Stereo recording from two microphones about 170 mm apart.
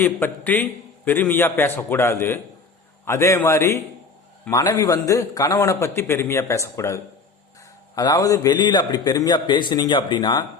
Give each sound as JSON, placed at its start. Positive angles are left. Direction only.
{"t": 0.0, "sound": "a man's voice", "side_deg": 10}